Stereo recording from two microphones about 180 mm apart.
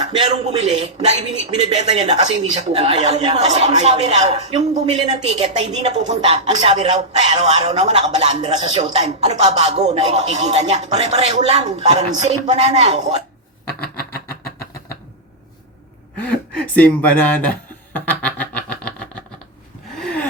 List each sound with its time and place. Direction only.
0.4 s speech: 35° right (ahead or behind)
3.8 s speech: 35° right (ahead or behind)
13.8 s a sound: 60° left (ahead or behind)
16.1 s speech: 5° left (ahead or behind)
17.9 s effects unit: 10° left (ahead or behind)
20.0 s gasp: 5° left (ahead or behind)